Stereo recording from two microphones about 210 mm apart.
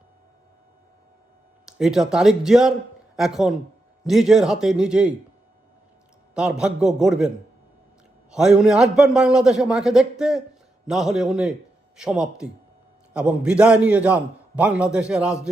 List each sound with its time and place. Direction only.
1.6 s a man's voice: centre (ahead or behind)
6.3 s a man's voice: 5° right (ahead or behind)
8.3 s a man's voice: 5° right (ahead or behind)